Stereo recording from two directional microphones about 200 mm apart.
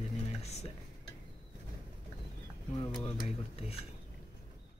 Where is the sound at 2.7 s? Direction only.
25° left (ahead or behind).